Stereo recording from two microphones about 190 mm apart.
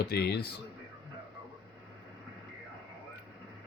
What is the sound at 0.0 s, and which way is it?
Speech, 55° left (ahead or behind).